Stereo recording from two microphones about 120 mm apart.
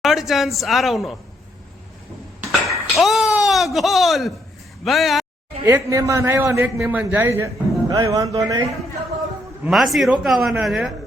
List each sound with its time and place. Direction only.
0.0 s a man's voice: 5° right (ahead or behind)
2.5 s a sound: centre (ahead or behind)
4.8 s a man's voice: centre (ahead or behind)
5.6 s speech: 25° right (ahead or behind)
9.6 s a man's voice: centre (ahead or behind)